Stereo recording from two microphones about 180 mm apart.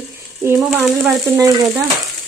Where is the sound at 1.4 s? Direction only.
20° right (ahead or behind).